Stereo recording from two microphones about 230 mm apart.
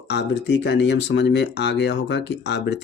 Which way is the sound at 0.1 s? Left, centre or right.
Left.